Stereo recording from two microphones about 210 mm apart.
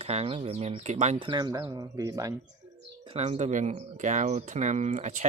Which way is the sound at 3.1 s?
30° right (ahead or behind).